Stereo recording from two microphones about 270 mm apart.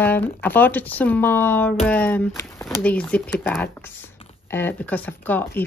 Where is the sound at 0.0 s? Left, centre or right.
Centre.